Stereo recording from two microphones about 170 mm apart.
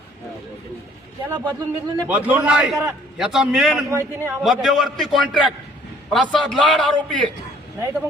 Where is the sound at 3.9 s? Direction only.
15° right (ahead or behind).